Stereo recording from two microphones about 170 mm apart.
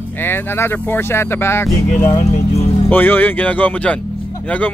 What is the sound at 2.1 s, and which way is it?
Music, 40° left (ahead or behind).